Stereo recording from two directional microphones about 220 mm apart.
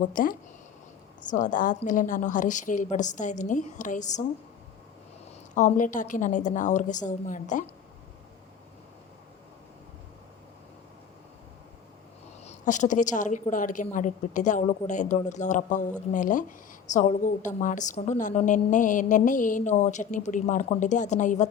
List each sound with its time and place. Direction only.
0.1 s a woman's voice: 40° left (ahead or behind)
5.5 s a woman's voice: 35° left (ahead or behind)
12.5 s a woman's voice: 35° left (ahead or behind)